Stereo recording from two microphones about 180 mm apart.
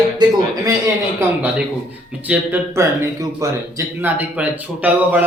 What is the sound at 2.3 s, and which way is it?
Speech, 10° right (ahead or behind).